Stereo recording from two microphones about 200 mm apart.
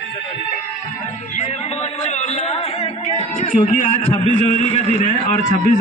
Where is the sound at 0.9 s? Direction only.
35° left (ahead or behind).